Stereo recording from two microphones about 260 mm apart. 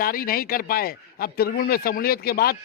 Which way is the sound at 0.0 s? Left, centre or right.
Left.